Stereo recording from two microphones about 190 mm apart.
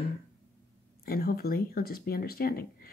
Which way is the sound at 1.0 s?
50° left (ahead or behind).